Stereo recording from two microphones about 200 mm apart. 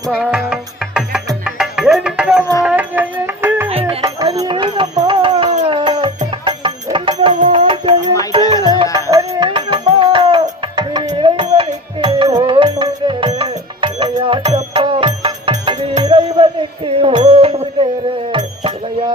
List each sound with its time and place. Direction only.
0.1 s music: 5° right (ahead or behind)
4.4 s a sound: 20° right (ahead or behind)
5.6 s music: 25° right (ahead or behind)